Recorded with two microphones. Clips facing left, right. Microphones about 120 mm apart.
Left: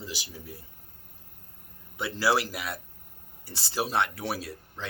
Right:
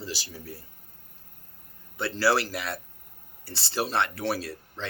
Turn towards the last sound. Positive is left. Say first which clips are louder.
# right 3 dB
turn(degrees=15)  # may be behind; listen again after turning